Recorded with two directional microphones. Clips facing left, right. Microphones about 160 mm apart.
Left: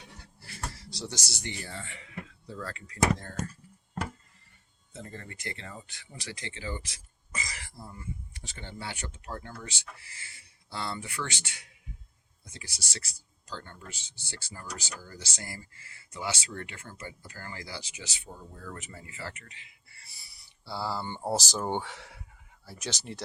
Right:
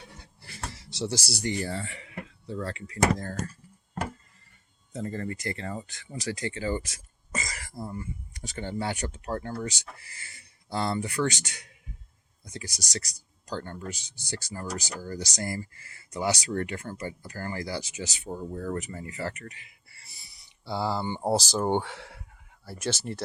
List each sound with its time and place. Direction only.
0.9 s speech: 30° right (ahead or behind)
2.9 s speech: 40° right (ahead or behind)
4.9 s speech: 40° right (ahead or behind)
13.9 s speech: 15° right (ahead or behind)
14.3 s speech: 40° right (ahead or behind)
19.3 s speech: 20° left (ahead or behind)
20.0 s a sound: 20° right (ahead or behind)
21.5 s speech: 15° right (ahead or behind)
22.9 s speech: 15° left (ahead or behind)